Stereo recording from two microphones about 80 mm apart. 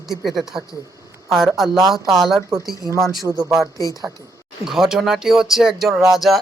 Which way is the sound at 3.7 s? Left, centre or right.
Left.